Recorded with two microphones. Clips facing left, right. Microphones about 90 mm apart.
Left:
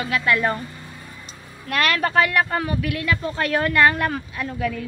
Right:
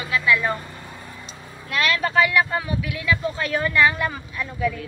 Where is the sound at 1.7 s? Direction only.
50° left (ahead or behind).